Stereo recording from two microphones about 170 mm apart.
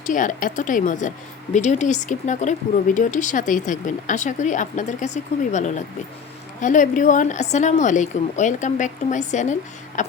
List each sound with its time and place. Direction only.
0.0 s speech: 50° left (ahead or behind)